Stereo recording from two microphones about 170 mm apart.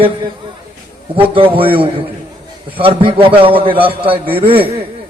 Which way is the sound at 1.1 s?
30° right (ahead or behind).